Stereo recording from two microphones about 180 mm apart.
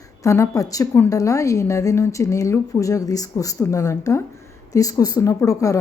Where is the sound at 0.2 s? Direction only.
20° left (ahead or behind).